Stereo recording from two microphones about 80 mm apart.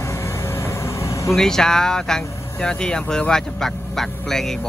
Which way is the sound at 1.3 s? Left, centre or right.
Centre.